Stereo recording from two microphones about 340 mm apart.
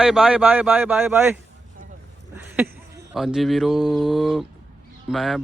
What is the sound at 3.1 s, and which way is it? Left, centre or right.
Speech, centre.